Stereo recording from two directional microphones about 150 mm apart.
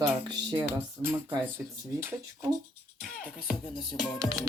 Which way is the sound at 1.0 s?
15° right (ahead or behind).